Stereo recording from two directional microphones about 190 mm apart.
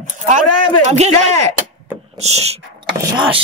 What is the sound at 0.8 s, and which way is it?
Speech, 35° right (ahead or behind).